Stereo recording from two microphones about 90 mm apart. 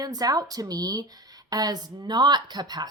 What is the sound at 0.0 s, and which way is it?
Speech, 45° right (ahead or behind).